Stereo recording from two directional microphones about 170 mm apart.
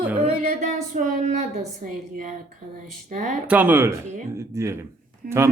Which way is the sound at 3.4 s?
10° right (ahead or behind).